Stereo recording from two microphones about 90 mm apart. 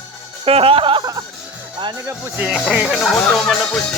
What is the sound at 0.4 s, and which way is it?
Speech, 90° right.